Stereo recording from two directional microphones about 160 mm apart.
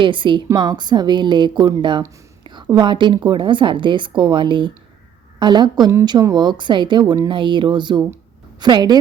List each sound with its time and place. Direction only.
0.0 s a woman's voice: 30° right (ahead or behind)